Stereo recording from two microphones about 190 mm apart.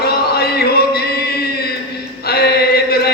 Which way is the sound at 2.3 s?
55° left (ahead or behind).